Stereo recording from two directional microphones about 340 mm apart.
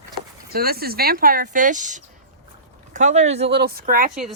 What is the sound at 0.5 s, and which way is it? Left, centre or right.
A woman's voice, right.